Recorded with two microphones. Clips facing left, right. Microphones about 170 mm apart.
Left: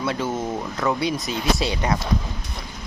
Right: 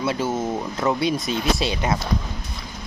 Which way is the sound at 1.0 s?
25° right (ahead or behind).